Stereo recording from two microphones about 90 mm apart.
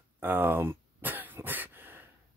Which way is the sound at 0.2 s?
20° right (ahead or behind).